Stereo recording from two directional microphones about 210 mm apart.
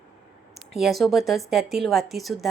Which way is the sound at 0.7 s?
Centre (ahead or behind).